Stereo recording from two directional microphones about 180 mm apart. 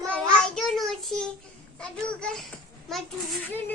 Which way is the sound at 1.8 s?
5° left (ahead or behind).